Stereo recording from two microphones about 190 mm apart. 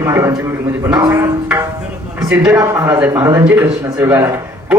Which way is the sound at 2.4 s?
5° right (ahead or behind).